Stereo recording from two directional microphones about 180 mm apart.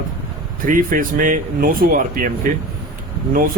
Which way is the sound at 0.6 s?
50° right (ahead or behind).